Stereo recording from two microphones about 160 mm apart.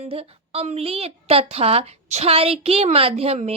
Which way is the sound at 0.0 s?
40° right (ahead or behind).